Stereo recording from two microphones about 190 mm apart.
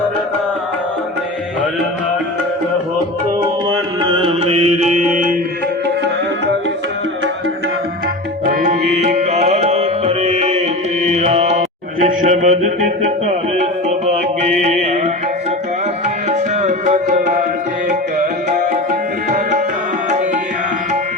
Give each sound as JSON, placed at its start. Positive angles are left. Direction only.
{"t": 3.7, "sound": "mantra", "side_deg": -25}
{"t": 8.4, "sound": "tabla", "side_deg": -40}
{"t": 11.0, "sound": "music", "side_deg": -35}
{"t": 16.3, "sound": "tabla", "side_deg": -40}
{"t": 18.7, "sound": "tabla", "side_deg": -45}